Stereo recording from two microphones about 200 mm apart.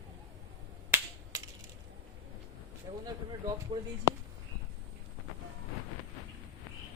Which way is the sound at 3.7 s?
20° right (ahead or behind).